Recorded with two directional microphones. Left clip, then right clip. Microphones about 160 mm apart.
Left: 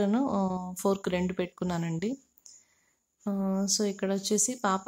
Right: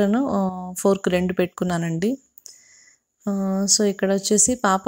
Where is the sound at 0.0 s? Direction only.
30° right (ahead or behind).